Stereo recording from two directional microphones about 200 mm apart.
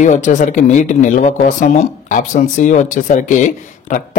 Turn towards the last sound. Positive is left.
turn(degrees=40)  # may be behind; listen again after turning